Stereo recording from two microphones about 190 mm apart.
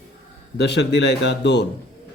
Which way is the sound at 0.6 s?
65° left (ahead or behind).